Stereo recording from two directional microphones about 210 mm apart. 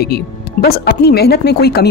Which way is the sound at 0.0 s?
50° left (ahead or behind).